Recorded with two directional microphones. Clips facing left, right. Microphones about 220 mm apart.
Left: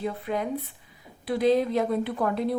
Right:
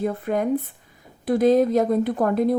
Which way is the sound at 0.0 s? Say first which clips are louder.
Right 6 dB; 50° right (ahead or behind).